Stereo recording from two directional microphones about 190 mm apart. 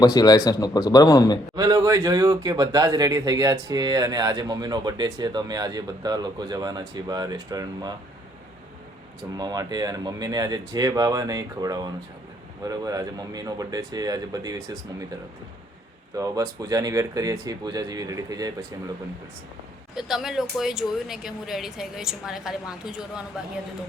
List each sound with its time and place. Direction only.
0.0 s speech: 20° left (ahead or behind)
1.5 s speech: 20° right (ahead or behind)
9.4 s speech: 20° right (ahead or behind)
20.0 s speech: centre (ahead or behind)